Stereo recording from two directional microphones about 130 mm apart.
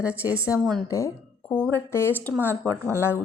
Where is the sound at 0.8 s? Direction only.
25° left (ahead or behind).